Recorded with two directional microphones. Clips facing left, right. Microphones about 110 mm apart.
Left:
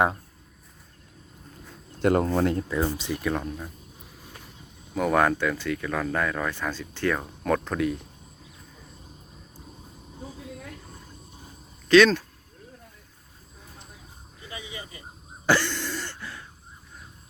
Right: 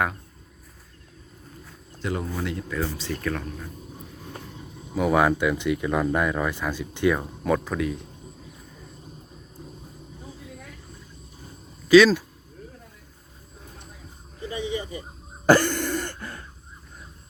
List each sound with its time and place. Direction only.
2.0 s speech: 55° left (ahead or behind)
2.6 s speech: 20° left (ahead or behind)
3.3 s speech: 25° left (ahead or behind)
4.9 s speech: 5° right (ahead or behind)
11.9 s speech: 5° right (ahead or behind)
15.4 s throat clearing: 45° right (ahead or behind)